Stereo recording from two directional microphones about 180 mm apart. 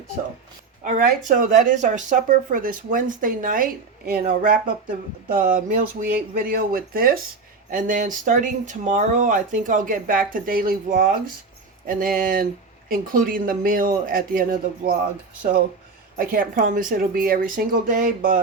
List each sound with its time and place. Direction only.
0.9 s speech: 50° right (ahead or behind)
16.1 s speech: 50° right (ahead or behind)